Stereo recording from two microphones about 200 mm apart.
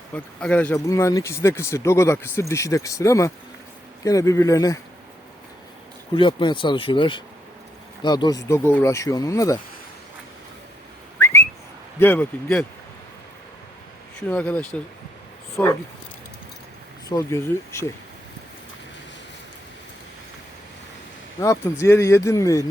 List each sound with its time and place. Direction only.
0.1 s speech: 5° left (ahead or behind)
6.1 s speech: 25° left (ahead or behind)
11.2 s whistling: 10° left (ahead or behind)
11.9 s speech: 10° left (ahead or behind)
14.2 s speech: 10° left (ahead or behind)
17.1 s speech: 15° left (ahead or behind)
21.4 s speech: 15° left (ahead or behind)